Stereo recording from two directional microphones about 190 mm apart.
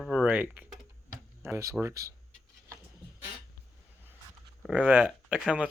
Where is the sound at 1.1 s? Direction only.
15° right (ahead or behind).